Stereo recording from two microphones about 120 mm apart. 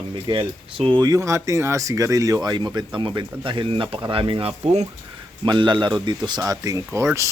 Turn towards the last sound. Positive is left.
turn(degrees=-25)  # may be behind; listen again after turning